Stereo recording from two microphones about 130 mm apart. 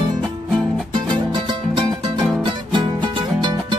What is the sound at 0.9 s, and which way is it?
Music, 35° right (ahead or behind).